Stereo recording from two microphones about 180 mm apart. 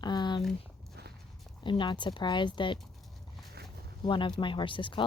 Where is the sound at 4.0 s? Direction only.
25° left (ahead or behind).